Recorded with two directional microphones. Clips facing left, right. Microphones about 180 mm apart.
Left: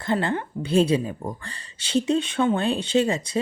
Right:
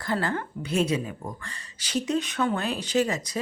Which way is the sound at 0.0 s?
25° left (ahead or behind).